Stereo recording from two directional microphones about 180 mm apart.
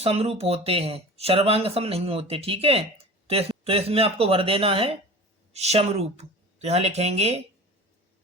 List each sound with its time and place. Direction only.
0.0 s speech: 35° right (ahead or behind)